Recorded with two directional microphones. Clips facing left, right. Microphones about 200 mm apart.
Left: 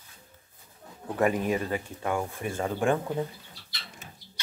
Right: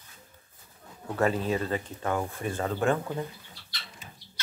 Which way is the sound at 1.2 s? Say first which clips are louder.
Left 1 dB; 15° left (ahead or behind).